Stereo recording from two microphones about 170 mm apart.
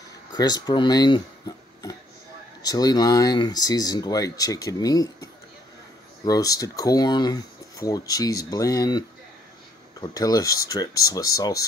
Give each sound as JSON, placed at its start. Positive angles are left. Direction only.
{"t": 0.3, "sound": "speech", "side_deg": 25}